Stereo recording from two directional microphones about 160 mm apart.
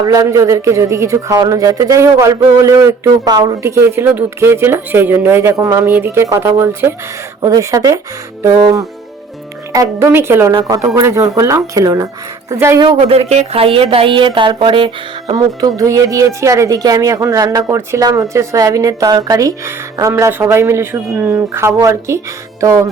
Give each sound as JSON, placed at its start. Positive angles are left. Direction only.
{"t": 0.0, "sound": "a man's voice", "side_deg": -20}
{"t": 10.5, "sound": "a man's voice", "side_deg": -25}
{"t": 12.8, "sound": "a man's voice", "side_deg": -35}